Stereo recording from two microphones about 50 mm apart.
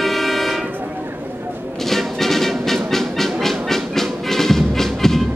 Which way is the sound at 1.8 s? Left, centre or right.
Centre.